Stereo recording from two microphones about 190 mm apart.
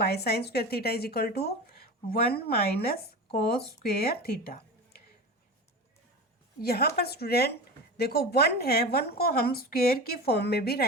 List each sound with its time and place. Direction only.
0.0 s a woman's voice: 55° left (ahead or behind)
3.8 s speech: 55° left (ahead or behind)
6.6 s a woman's voice: 55° left (ahead or behind)